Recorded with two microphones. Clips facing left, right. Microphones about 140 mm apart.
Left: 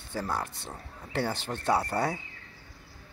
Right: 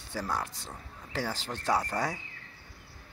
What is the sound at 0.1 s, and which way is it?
Speech, 20° left (ahead or behind).